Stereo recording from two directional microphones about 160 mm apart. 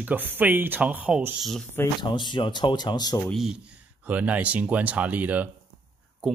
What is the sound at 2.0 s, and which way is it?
Speech, 30° left (ahead or behind).